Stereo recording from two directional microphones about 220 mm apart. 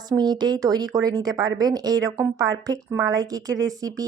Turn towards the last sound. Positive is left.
turn(degrees=-15)  # may be behind; listen again after turning